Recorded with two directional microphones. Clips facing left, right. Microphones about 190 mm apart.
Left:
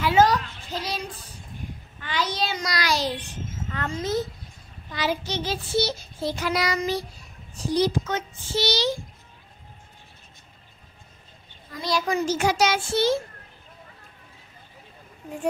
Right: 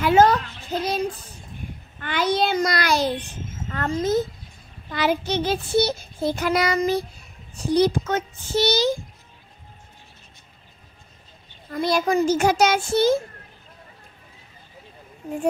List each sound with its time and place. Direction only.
0.0 s a sound: 55° right (ahead or behind)
3.7 s child singing: 45° right (ahead or behind)
11.7 s child singing: 55° right (ahead or behind)